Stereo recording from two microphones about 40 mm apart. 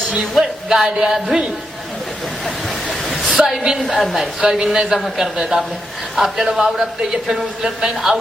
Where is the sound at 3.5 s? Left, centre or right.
Centre.